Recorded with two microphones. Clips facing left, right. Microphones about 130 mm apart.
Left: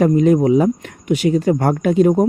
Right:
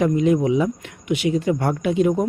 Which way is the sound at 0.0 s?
45° left (ahead or behind).